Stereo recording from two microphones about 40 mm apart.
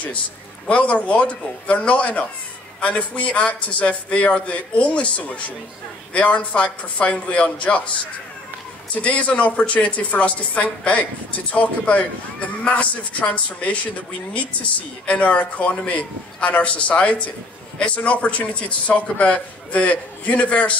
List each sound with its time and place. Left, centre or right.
0.7 s a man's voice: left
8.9 s a man's voice: left
15.0 s a man's voice: left